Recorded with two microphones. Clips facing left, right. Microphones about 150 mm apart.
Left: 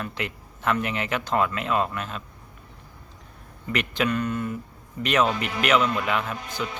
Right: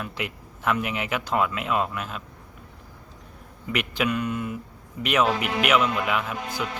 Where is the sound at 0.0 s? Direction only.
5° right (ahead or behind).